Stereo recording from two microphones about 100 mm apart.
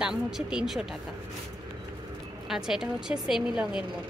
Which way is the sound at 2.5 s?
5° right (ahead or behind).